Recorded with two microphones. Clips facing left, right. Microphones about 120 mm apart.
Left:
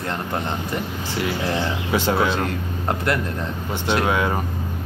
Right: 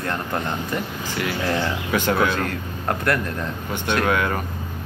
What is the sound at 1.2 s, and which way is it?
Speech, 20° left (ahead or behind).